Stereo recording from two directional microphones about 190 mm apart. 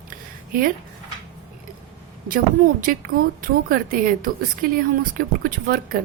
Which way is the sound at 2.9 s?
50° right (ahead or behind).